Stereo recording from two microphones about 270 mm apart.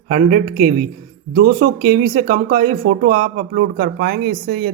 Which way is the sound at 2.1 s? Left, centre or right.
Right.